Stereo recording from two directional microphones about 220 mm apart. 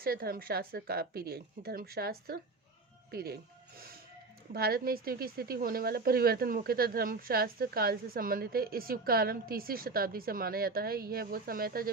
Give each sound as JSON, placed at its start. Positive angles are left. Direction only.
{"t": 0.0, "sound": "a woman's voice", "side_deg": -40}
{"t": 4.5, "sound": "a woman's voice", "side_deg": -45}